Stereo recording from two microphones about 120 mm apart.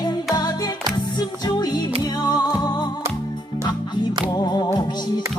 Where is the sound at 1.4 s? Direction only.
35° left (ahead or behind).